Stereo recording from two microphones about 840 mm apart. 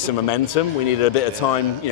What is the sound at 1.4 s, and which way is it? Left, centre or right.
Speech, left.